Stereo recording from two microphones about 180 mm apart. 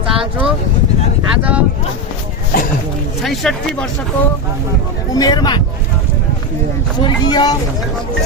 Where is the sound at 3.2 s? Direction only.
Centre (ahead or behind).